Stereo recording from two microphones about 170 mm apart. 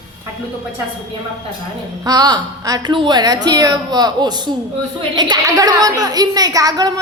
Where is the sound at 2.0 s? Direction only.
25° right (ahead or behind).